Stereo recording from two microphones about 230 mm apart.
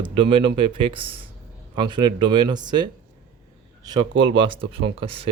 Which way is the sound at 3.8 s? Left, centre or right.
Centre.